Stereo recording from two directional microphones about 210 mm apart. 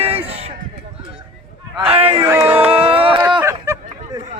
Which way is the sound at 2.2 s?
10° right (ahead or behind).